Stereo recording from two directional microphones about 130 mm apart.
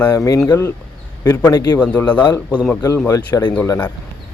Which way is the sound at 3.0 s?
25° left (ahead or behind).